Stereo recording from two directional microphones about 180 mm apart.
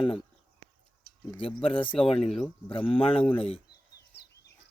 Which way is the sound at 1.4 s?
30° left (ahead or behind).